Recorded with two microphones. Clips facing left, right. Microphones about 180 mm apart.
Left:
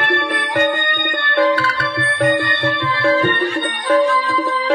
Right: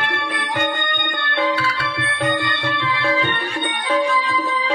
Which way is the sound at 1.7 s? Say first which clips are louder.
Left 4 dB; 55° left (ahead or behind).